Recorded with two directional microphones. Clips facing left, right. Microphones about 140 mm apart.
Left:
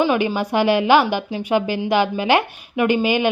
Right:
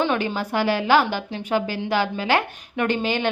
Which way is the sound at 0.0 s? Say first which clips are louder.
Left 4 dB; 10° left (ahead or behind).